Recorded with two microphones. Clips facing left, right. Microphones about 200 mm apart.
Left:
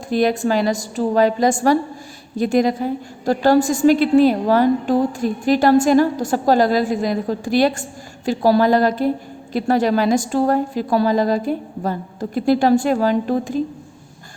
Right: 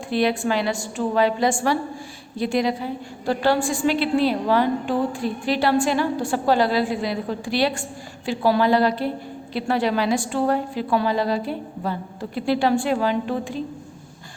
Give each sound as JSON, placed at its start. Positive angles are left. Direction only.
{"t": 0.1, "sound": "a woman's voice", "side_deg": 45}